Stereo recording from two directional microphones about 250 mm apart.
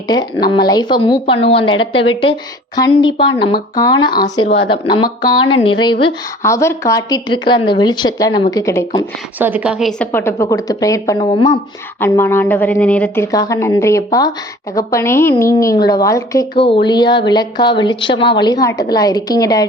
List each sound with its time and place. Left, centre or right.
0.1 s a woman's voice: centre
9.4 s a woman's voice: centre